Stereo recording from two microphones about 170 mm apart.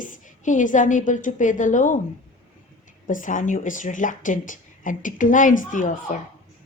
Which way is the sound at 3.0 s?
50° left (ahead or behind).